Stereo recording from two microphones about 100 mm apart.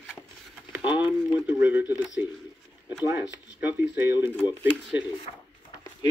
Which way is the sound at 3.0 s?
20° right (ahead or behind).